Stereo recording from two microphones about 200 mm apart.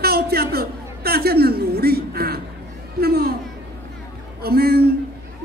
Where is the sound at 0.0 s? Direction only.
50° right (ahead or behind).